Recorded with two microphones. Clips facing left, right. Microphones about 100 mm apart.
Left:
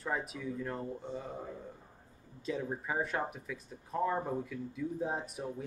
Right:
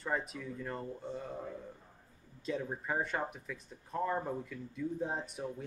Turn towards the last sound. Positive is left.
turn(degrees=5)  # may be behind; listen again after turning